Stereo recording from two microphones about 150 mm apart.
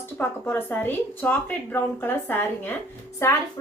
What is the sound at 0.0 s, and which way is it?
A woman's voice, 15° left (ahead or behind).